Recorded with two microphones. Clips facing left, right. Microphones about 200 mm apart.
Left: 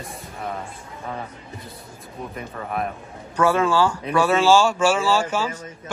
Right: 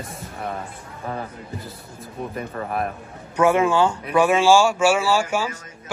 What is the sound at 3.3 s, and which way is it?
A man's voice, 20° right (ahead or behind).